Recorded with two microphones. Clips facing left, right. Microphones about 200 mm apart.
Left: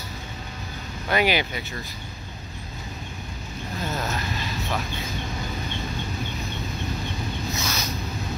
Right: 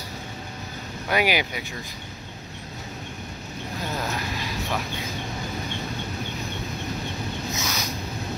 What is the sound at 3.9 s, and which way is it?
Vehicle, 10° right (ahead or behind).